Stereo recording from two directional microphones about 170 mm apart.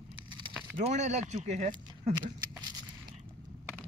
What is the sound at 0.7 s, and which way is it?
Speech, 45° right (ahead or behind).